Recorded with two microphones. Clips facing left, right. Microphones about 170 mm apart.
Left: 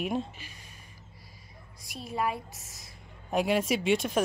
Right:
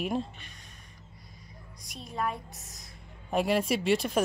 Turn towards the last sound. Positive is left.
turn(degrees=0)  # may be behind; listen again after turning